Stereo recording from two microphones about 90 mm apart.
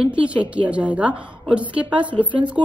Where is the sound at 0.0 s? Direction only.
15° right (ahead or behind).